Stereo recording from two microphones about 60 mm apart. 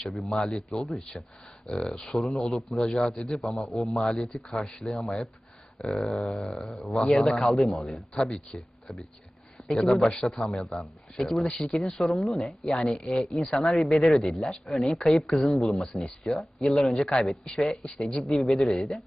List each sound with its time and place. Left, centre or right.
0.1 s speech: centre
0.4 s a man's voice: centre
2.1 s a man's voice: centre
3.3 s speech: centre
4.0 s a man's voice: centre
7.0 s a man's voice: centre
8.5 s a sound: centre
9.7 s a man's voice: centre
11.4 s a man's voice: centre
12.0 s speech: centre
12.6 s a man's voice: centre
18.1 s speech: centre